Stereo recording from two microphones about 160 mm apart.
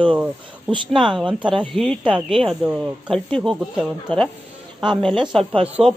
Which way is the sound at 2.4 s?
Centre (ahead or behind).